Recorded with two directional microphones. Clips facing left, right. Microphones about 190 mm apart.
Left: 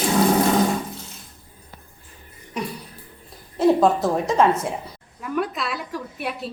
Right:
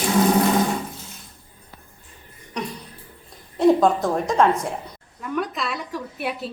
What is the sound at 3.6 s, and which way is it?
A woman's voice, centre (ahead or behind).